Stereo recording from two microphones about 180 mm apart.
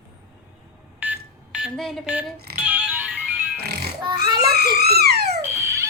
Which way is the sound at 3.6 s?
60° right (ahead or behind).